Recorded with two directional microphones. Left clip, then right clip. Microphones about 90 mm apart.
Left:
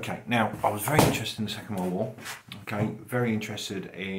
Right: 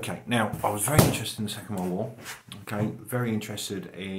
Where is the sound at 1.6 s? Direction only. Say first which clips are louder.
Left 1 dB; 5° right (ahead or behind).